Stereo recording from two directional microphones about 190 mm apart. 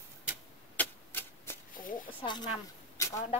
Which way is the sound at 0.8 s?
10° left (ahead or behind).